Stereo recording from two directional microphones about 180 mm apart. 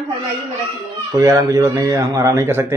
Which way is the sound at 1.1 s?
20° right (ahead or behind).